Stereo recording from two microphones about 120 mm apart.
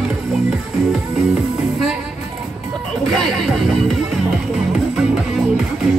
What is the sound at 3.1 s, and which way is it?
Music, centre (ahead or behind).